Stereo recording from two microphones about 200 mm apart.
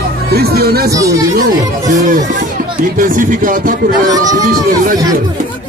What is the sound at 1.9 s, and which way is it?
A man's voice, 40° right (ahead or behind).